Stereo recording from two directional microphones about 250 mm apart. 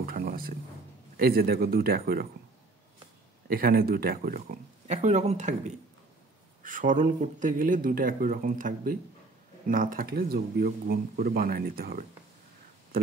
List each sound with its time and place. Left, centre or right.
0.0 s a sound: right
1.1 s speech: right
3.4 s speech: right